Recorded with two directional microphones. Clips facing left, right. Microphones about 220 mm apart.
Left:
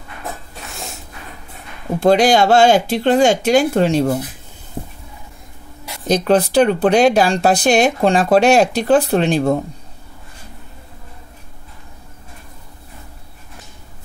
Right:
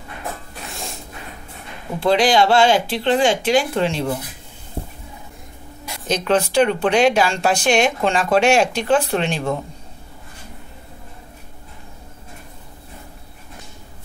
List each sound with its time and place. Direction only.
2.0 s speech: 45° left (ahead or behind)
6.0 s speech: 40° left (ahead or behind)